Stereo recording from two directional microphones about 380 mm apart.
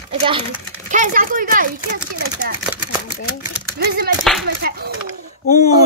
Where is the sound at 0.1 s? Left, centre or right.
Centre.